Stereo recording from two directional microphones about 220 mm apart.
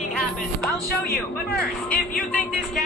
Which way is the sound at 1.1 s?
45° left (ahead or behind).